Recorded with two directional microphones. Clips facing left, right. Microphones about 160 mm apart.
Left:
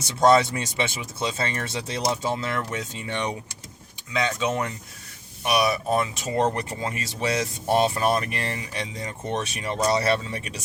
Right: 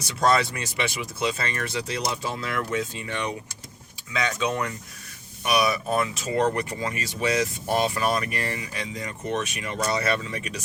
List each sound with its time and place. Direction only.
0.0 s speech: 25° left (ahead or behind)